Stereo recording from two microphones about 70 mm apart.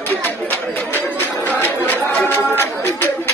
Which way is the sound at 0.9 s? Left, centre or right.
Left.